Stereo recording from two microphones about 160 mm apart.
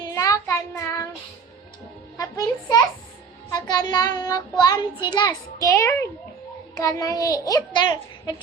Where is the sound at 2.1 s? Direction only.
25° left (ahead or behind).